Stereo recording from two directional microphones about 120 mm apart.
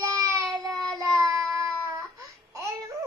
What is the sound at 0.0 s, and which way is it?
Child singing, 25° right (ahead or behind).